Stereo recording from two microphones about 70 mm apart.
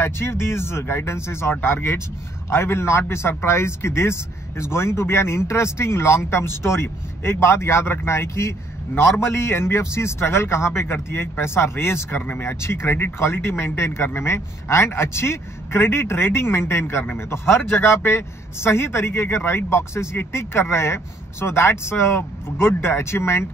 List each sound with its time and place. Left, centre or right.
0.0 s a man's voice: left